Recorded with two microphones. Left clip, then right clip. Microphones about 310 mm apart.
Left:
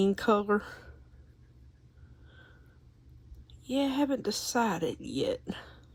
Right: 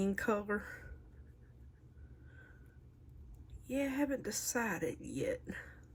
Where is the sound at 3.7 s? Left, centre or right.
Centre.